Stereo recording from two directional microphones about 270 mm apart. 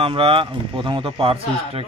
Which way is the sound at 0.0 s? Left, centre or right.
Centre.